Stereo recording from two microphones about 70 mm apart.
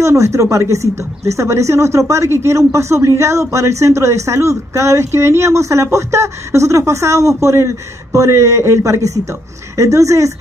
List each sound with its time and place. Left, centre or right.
0.0 s speech: right